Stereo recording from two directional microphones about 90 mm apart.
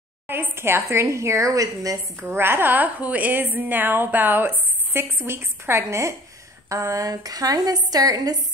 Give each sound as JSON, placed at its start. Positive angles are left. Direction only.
{"t": 0.3, "sound": "a woman's voice", "side_deg": -25}
{"t": 2.2, "sound": "a woman's voice", "side_deg": -25}